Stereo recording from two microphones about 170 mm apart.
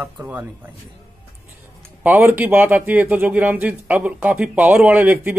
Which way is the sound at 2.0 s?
10° right (ahead or behind).